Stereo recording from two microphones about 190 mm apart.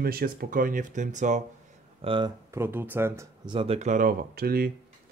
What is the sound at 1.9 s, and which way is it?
Speech, 25° right (ahead or behind).